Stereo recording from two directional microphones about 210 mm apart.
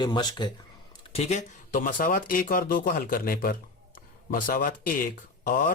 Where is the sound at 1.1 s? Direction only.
30° left (ahead or behind).